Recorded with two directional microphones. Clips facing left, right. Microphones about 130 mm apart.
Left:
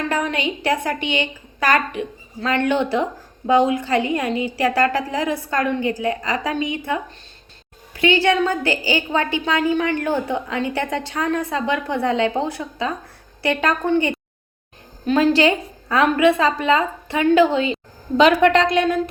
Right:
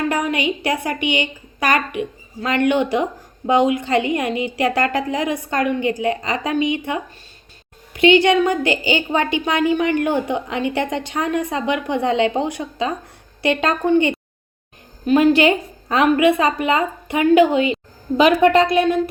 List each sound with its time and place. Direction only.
0.1 s a woman's voice: 10° right (ahead or behind)